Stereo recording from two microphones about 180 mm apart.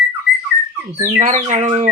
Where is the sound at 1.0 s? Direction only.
40° right (ahead or behind).